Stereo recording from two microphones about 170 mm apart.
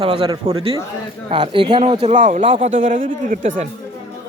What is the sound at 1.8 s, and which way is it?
Speech, 40° right (ahead or behind).